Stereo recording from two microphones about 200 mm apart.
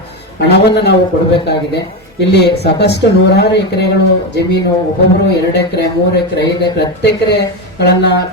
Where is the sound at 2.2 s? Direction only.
55° left (ahead or behind).